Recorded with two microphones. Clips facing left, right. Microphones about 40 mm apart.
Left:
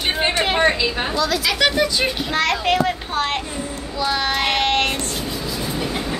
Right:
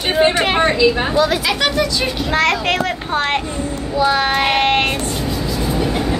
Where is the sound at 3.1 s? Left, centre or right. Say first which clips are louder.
Right 4 dB; centre.